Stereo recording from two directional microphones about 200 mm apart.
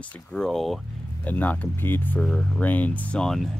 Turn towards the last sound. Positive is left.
turn(degrees=5)  # may be behind; listen again after turning